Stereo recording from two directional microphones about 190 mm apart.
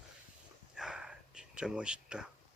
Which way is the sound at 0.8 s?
5° right (ahead or behind).